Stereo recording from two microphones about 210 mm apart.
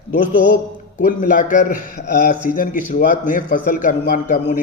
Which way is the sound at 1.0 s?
40° left (ahead or behind).